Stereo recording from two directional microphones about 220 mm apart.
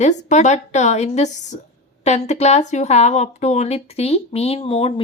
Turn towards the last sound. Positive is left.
turn(degrees=25)  # may be behind; listen again after turning